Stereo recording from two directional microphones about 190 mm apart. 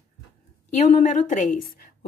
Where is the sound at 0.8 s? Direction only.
40° left (ahead or behind).